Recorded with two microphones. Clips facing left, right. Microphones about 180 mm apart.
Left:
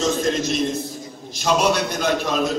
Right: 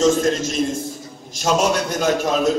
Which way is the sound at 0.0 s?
45° right (ahead or behind).